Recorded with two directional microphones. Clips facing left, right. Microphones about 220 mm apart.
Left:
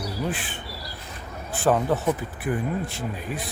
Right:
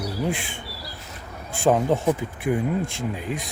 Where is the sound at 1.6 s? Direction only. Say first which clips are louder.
Right 2 dB; 15° right (ahead or behind).